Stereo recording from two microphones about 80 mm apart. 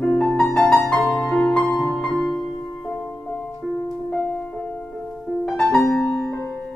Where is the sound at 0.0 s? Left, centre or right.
Centre.